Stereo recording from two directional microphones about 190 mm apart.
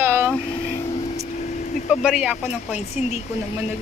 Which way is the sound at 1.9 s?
5° right (ahead or behind).